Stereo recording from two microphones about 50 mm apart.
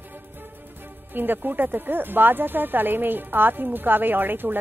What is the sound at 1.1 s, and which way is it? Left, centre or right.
Speech, right.